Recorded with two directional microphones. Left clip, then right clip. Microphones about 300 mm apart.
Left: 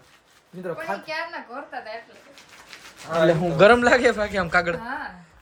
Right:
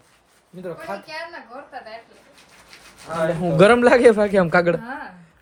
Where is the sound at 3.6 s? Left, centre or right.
Centre.